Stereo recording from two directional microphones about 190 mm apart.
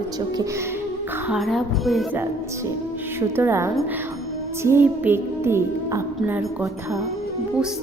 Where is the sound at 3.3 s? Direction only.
15° right (ahead or behind).